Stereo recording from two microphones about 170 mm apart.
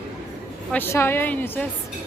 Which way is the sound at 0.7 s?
15° left (ahead or behind).